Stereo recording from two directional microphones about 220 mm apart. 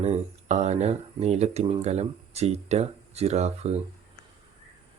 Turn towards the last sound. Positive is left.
turn(degrees=-30)  # may be behind; listen again after turning